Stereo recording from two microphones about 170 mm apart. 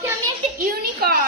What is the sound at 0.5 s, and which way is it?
Speech, 60° right (ahead or behind).